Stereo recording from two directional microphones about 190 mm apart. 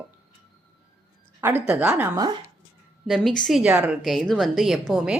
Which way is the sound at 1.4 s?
10° right (ahead or behind).